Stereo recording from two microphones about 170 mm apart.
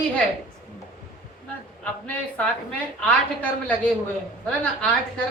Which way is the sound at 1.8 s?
10° left (ahead or behind).